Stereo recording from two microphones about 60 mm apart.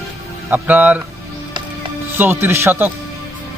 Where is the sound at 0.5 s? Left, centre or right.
Right.